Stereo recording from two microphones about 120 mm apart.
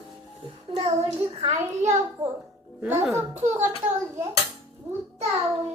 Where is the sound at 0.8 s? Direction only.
45° right (ahead or behind).